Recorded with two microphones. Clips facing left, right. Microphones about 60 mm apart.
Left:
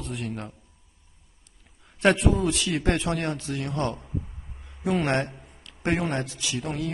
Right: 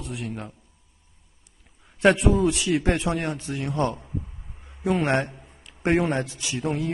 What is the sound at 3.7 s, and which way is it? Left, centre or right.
A man's voice, centre.